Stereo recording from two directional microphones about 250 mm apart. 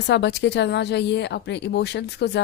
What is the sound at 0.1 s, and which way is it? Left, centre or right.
Speech, left.